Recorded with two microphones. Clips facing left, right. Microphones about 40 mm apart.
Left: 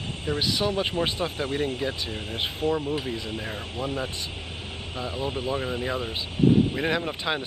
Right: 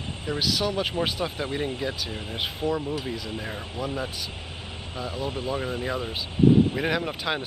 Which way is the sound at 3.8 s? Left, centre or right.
Centre.